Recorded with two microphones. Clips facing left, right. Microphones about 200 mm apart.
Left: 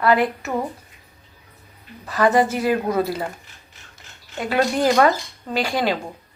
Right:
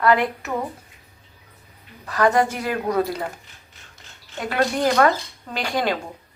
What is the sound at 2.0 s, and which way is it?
Speech, 5° left (ahead or behind).